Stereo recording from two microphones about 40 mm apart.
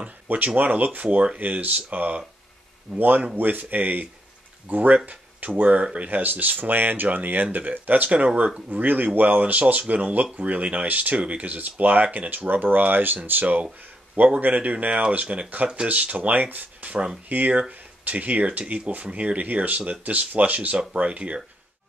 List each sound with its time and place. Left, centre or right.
0.0 s speech: right
2.9 s speech: centre
3.3 s speech: right
14.4 s speech: right
15.5 s speech: right
18.0 s speech: right